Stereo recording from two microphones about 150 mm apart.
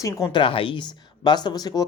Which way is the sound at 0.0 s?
20° left (ahead or behind).